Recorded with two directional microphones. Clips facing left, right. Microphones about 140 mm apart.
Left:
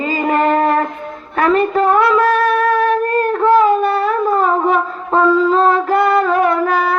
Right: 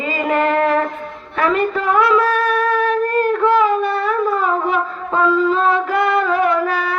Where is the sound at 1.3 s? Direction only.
40° left (ahead or behind).